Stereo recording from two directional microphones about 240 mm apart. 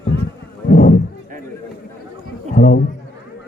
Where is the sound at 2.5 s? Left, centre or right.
Left.